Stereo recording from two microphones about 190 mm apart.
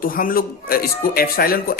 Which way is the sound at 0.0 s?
50° left (ahead or behind).